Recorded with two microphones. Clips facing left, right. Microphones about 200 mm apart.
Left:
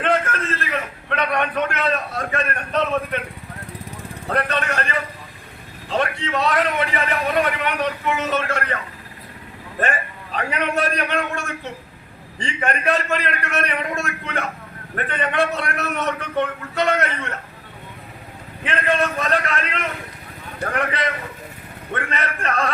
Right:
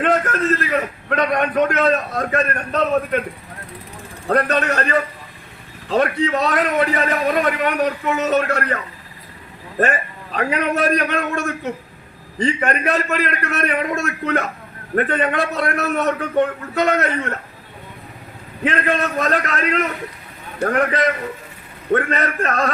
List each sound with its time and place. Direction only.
0.0 s a man's voice: 40° right (ahead or behind)
4.3 s a man's voice: 40° right (ahead or behind)
10.3 s a man's voice: 40° right (ahead or behind)
18.6 s a man's voice: 40° right (ahead or behind)